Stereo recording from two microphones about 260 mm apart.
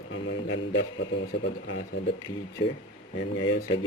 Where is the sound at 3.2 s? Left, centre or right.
Left.